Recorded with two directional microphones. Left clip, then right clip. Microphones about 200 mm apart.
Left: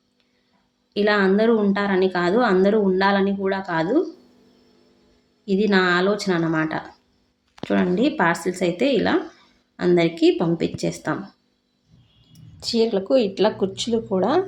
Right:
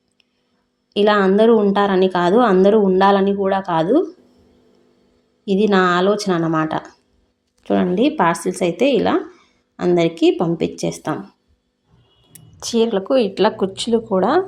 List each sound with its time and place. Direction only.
0.9 s speech: 25° right (ahead or behind)
5.5 s speech: 25° right (ahead or behind)
12.5 s speech: 20° right (ahead or behind)